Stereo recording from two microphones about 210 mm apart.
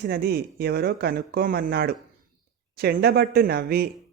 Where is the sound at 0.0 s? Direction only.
50° right (ahead or behind).